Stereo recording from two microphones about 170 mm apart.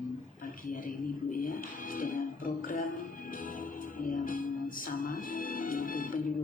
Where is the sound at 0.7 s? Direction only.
50° left (ahead or behind).